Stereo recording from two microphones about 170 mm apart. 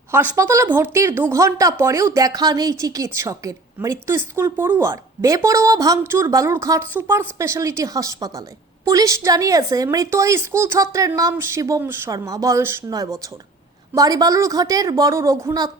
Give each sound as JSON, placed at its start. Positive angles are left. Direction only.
{"t": 0.1, "sound": "a woman's voice", "side_deg": -10}